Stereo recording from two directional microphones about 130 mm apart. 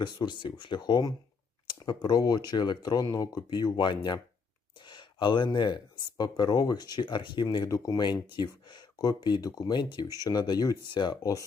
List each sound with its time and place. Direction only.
0.0 s speech: 35° left (ahead or behind)